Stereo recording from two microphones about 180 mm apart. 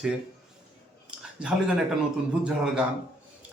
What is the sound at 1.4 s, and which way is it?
Speech, 5° right (ahead or behind).